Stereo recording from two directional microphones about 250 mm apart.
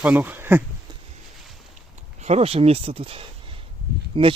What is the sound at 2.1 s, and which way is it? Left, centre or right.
Speech, right.